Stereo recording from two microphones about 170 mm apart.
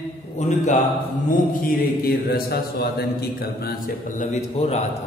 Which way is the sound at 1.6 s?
60° left (ahead or behind).